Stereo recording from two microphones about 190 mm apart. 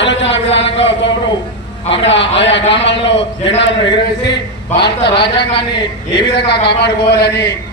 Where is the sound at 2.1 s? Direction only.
70° left (ahead or behind).